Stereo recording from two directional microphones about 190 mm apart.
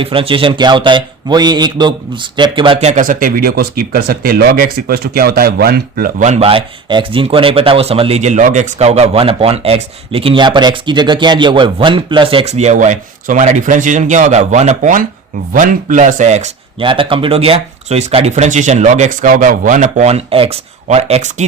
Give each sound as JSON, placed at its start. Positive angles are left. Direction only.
{"t": 0.0, "sound": "speech", "side_deg": -30}
{"t": 2.9, "sound": "speech", "side_deg": -45}
{"t": 16.8, "sound": "speech", "side_deg": -25}